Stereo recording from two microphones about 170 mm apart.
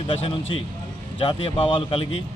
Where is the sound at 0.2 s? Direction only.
30° left (ahead or behind).